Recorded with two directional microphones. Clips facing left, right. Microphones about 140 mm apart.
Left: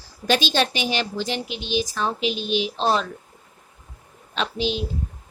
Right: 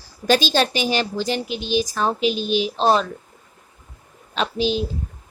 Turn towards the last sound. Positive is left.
turn(degrees=-40)  # may be behind; listen again after turning